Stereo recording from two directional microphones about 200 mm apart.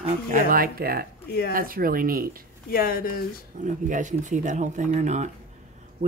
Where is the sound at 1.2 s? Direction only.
50° left (ahead or behind).